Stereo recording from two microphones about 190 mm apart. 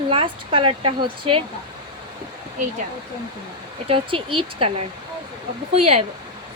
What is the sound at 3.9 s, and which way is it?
Speech, 30° right (ahead or behind).